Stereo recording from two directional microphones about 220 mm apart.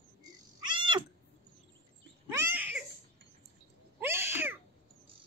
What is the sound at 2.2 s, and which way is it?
Cat, 10° right (ahead or behind).